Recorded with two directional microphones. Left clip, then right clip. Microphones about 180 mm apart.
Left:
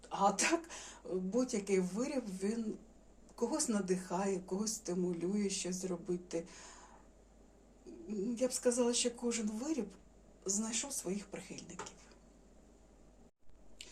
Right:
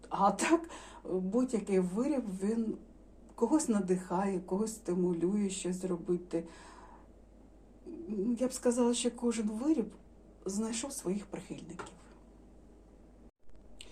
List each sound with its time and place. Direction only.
0.0 s speech: 20° right (ahead or behind)
8.0 s speech: 20° right (ahead or behind)